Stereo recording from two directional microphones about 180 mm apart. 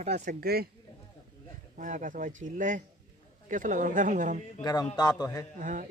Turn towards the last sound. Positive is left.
turn(degrees=-45)  # may be behind; listen again after turning